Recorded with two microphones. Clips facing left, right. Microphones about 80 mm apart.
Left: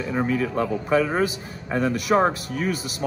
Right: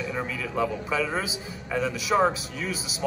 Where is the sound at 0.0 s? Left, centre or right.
Left.